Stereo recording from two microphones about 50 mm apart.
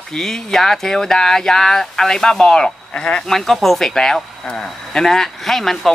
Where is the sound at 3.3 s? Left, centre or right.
Centre.